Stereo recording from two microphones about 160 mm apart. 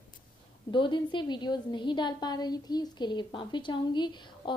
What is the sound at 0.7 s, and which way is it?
A woman's voice, 30° left (ahead or behind).